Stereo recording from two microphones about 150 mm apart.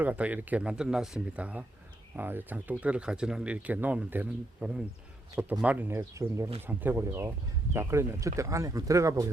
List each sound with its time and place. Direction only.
0.0 s speech: 10° right (ahead or behind)